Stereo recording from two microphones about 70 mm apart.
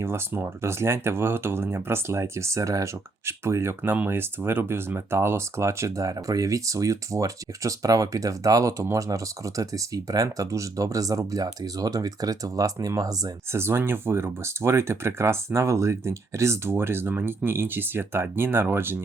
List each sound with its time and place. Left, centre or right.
0.0 s speech: right
13.5 s speech: right